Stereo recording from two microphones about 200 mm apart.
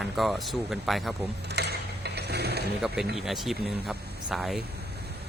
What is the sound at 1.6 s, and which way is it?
Mechanisms, 55° right (ahead or behind).